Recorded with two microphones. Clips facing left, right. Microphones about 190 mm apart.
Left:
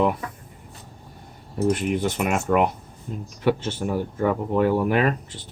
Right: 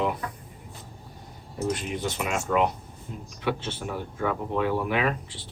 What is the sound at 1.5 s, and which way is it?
Speech, 60° left (ahead or behind).